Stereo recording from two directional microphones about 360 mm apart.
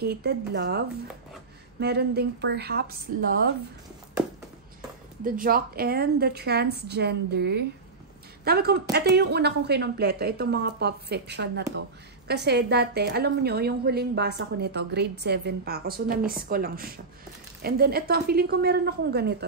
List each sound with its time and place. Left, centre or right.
0.0 s a woman's voice: right
5.2 s a woman's voice: right